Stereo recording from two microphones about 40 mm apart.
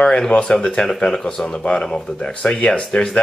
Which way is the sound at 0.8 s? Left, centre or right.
Left.